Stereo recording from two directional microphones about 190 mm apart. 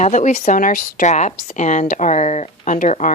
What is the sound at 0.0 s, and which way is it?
Speech, 40° left (ahead or behind).